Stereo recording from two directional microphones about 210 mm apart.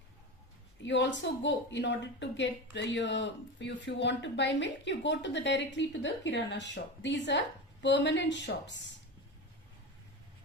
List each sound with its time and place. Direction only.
0.8 s a woman's voice: 60° left (ahead or behind)